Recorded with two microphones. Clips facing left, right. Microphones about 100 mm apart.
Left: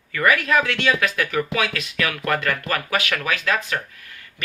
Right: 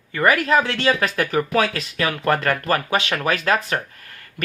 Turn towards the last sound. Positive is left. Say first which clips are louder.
# right 2 dB
turn(degrees=-40)  # may be behind; listen again after turning